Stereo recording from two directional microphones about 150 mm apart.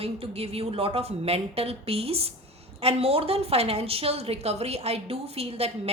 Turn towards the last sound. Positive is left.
turn(degrees=-45)  # may be behind; listen again after turning